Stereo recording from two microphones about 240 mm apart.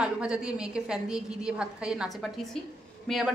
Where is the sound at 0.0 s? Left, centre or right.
Centre.